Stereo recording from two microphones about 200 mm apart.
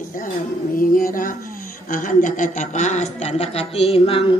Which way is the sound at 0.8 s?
45° left (ahead or behind).